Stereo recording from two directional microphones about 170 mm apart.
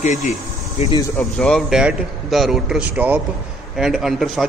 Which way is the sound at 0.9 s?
20° left (ahead or behind).